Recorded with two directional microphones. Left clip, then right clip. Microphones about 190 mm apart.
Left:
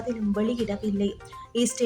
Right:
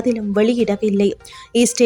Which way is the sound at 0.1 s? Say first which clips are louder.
Right 11 dB; 40° right (ahead or behind).